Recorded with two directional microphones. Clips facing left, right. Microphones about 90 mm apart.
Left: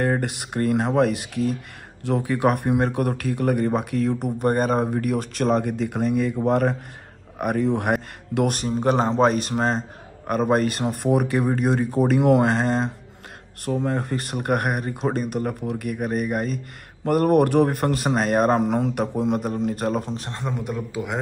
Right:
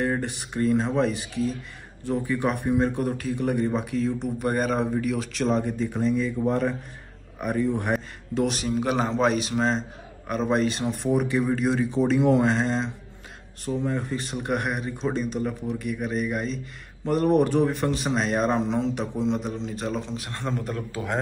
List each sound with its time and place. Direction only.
0.0 s a man's voice: 60° left (ahead or behind)
8.5 s a man's voice: 45° left (ahead or behind)
20.2 s speech: 20° left (ahead or behind)